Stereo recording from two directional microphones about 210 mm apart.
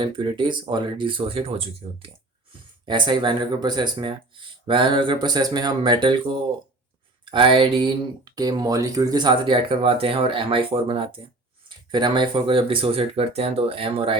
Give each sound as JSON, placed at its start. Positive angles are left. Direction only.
{"t": 0.0, "sound": "speech", "side_deg": -25}